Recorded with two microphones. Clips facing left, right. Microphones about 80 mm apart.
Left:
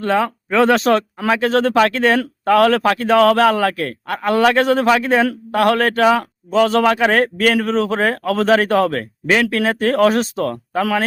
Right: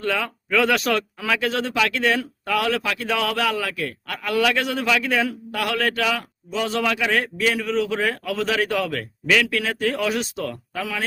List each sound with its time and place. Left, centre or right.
0.0 s a man's voice: left
4.0 s a man's voice: left